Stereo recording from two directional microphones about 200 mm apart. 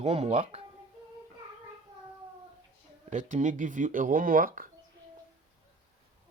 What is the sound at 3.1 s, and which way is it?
Speech, 40° right (ahead or behind).